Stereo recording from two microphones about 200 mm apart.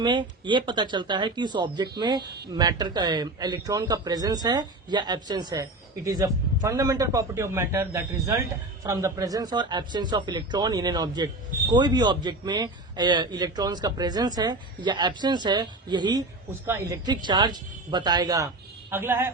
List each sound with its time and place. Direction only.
0.0 s a man's voice: 25° right (ahead or behind)